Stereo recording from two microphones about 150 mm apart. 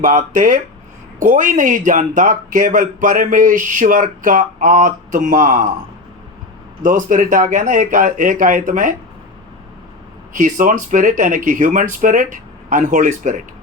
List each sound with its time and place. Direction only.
0.0 s a man's voice: 55° right (ahead or behind)
6.8 s a man's voice: 60° right (ahead or behind)
10.3 s a man's voice: 55° right (ahead or behind)